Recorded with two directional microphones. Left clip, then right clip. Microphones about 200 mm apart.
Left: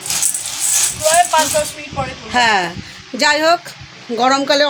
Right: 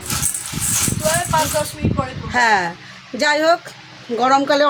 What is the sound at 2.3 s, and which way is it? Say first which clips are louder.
Speech: left 2 dB; 20° left (ahead or behind).